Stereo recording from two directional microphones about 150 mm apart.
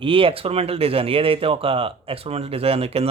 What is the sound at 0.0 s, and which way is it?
Speech, 35° right (ahead or behind).